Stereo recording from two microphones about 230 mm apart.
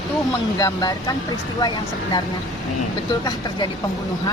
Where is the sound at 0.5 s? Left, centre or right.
Centre.